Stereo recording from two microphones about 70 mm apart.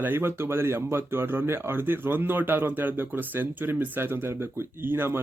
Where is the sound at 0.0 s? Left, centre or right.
Right.